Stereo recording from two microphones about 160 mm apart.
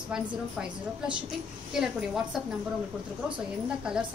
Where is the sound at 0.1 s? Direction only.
5° right (ahead or behind).